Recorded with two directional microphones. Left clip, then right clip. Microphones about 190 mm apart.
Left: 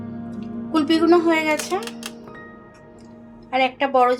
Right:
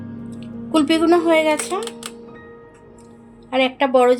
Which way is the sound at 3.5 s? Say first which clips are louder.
Right 2 dB; 35° right (ahead or behind).